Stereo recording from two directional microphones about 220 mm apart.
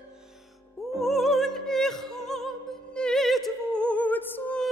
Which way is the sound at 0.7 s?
Centre (ahead or behind).